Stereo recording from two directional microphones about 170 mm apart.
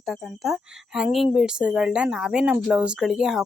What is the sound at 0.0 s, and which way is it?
Speech, centre (ahead or behind).